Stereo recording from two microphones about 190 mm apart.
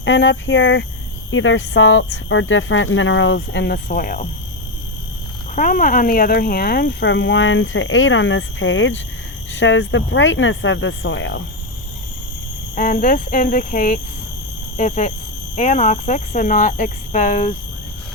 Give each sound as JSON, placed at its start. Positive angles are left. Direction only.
{"t": 0.0, "sound": "speech", "side_deg": 70}
{"t": 1.3, "sound": "speech", "side_deg": 90}
{"t": 5.5, "sound": "speech", "side_deg": 45}
{"t": 12.7, "sound": "speech", "side_deg": 45}